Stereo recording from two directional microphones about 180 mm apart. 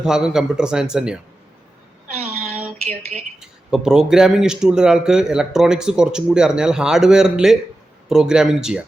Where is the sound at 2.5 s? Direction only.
35° right (ahead or behind).